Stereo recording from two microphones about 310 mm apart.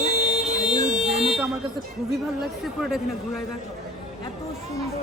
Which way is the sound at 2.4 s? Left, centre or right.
Centre.